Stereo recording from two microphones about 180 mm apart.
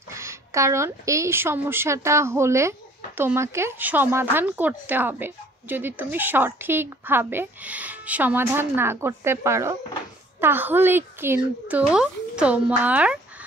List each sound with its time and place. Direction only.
0.1 s speech: 15° right (ahead or behind)